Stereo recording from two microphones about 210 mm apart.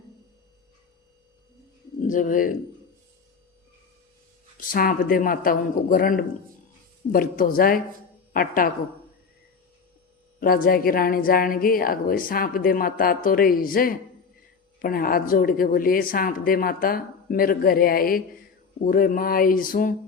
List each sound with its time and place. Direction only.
2.0 s speech: 40° left (ahead or behind)
4.6 s a woman's voice: 40° left (ahead or behind)
10.4 s a woman's voice: 45° left (ahead or behind)